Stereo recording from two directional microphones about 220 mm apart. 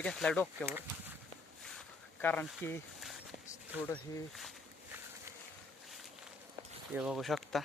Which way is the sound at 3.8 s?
5° left (ahead or behind).